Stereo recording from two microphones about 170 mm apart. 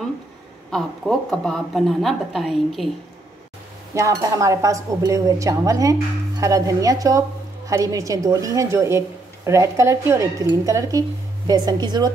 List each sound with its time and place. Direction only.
0.7 s speech: 5° left (ahead or behind)
3.9 s speech: 20° right (ahead or behind)